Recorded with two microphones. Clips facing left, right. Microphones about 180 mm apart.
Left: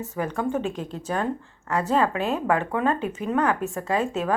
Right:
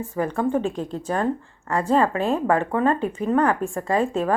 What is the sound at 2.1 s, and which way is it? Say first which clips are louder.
Speech: right 3 dB; 5° left (ahead or behind).